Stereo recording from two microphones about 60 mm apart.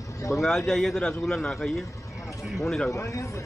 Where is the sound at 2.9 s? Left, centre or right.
Left.